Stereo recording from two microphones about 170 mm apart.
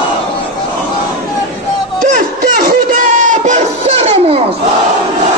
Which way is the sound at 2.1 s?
55° right (ahead or behind).